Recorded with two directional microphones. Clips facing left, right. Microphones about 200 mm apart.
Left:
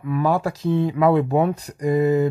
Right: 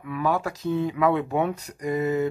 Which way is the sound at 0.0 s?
35° left (ahead or behind).